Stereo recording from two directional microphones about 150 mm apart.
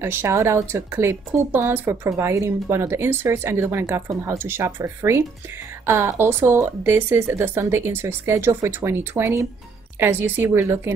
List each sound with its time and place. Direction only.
0.0 s speech: 15° right (ahead or behind)